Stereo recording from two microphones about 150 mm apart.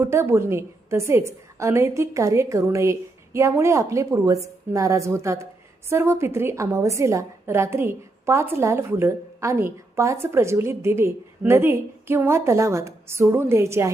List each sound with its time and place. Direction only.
0.0 s a woman's voice: 15° right (ahead or behind)